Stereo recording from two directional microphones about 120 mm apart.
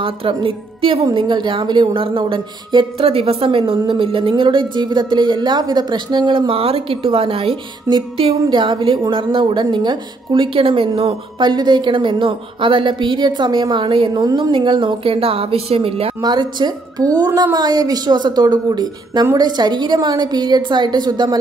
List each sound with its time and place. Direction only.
0.0 s a woman's voice: 50° right (ahead or behind)
14.2 s a woman's voice: 35° right (ahead or behind); by 16.1 s 55° right (ahead or behind)
16.2 s a woman's voice: 40° right (ahead or behind)